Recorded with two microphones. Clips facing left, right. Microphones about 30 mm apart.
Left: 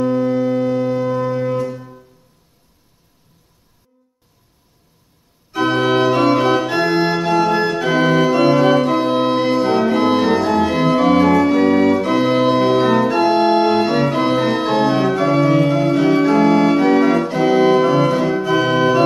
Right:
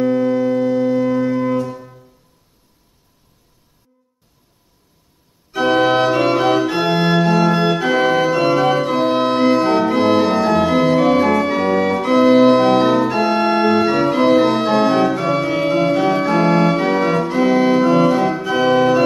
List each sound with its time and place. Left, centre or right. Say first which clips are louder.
0.0 s music: right 1 dB; centre
5.5 s organ: right 2 dB; centre
15.6 s organ: even; centre
15.9 s organ: left 2 dB; centre
16.3 s organ: left 1 dB; centre
16.7 s organ: left 3 dB; centre